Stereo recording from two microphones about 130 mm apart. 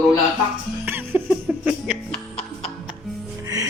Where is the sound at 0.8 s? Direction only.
15° right (ahead or behind).